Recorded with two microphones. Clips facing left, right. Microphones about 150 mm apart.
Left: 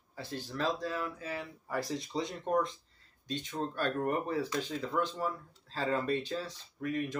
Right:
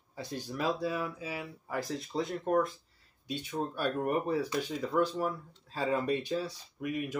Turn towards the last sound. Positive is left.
turn(degrees=-10)  # may be behind; listen again after turning